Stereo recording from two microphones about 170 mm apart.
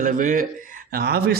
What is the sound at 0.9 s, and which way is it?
Speech, 65° right (ahead or behind).